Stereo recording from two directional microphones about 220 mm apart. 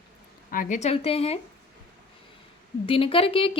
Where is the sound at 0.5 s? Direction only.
35° left (ahead or behind).